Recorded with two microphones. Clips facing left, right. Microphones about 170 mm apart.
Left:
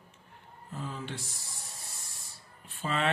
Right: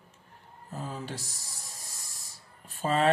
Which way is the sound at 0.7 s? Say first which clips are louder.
Right 1 dB; 40° right (ahead or behind).